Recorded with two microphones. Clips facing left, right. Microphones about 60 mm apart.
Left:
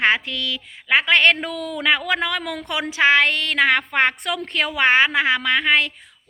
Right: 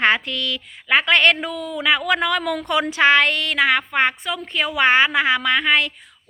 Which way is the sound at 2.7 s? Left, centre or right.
Centre.